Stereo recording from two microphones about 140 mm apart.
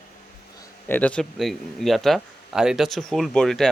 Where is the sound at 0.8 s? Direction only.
10° left (ahead or behind).